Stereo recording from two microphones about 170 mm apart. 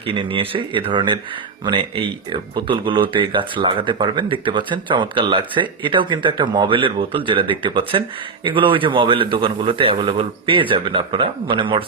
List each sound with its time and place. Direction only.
0.1 s a man's voice: 30° right (ahead or behind)